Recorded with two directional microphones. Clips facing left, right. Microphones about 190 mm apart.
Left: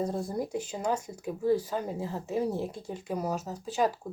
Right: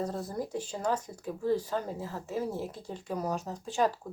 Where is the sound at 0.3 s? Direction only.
10° left (ahead or behind).